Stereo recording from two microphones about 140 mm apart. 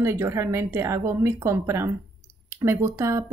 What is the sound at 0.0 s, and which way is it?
Speech, 20° right (ahead or behind).